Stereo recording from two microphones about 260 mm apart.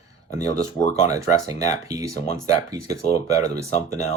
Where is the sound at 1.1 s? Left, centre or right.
Centre.